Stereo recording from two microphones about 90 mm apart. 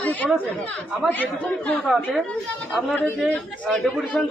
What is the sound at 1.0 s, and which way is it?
Speech, 20° left (ahead or behind).